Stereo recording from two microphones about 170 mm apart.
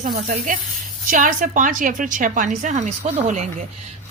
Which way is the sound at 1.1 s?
50° right (ahead or behind).